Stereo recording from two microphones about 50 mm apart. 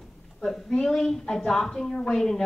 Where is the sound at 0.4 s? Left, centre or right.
Centre.